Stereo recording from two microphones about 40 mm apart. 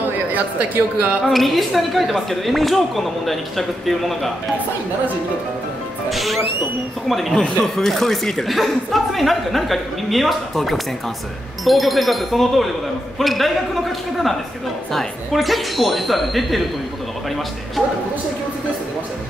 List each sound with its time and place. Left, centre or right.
0.0 s a sound: right
1.2 s speech: centre
6.0 s speech: centre
7.3 s speech: centre
7.7 s speech: centre